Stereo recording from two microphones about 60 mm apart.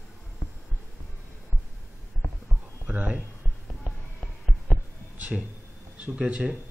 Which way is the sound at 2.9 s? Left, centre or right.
Right.